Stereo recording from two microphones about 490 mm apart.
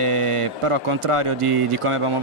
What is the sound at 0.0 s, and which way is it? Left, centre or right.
Speech, right.